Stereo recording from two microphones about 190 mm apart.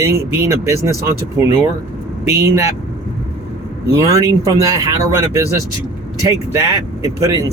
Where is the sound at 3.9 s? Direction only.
15° right (ahead or behind).